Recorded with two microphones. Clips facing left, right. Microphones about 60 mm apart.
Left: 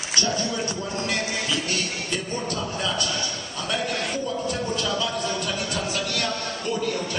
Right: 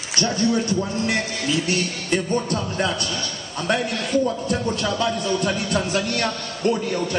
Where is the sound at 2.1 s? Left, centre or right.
Right.